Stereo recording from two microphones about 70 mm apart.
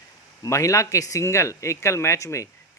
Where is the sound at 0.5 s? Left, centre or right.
Left.